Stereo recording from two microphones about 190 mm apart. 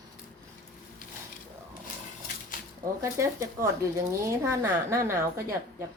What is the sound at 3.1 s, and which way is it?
Speech, 15° right (ahead or behind).